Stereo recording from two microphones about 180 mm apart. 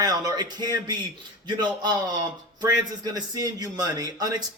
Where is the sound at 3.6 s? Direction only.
20° right (ahead or behind).